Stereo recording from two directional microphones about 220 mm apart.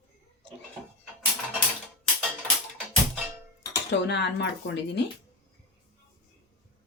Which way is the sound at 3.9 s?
55° left (ahead or behind).